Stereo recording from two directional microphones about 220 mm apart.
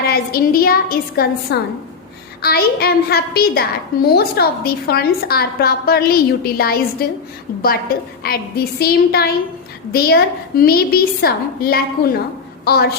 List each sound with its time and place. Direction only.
0.0 s a woman's voice: 45° left (ahead or behind)